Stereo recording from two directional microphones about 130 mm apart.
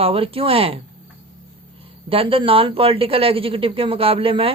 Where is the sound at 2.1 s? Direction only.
45° right (ahead or behind).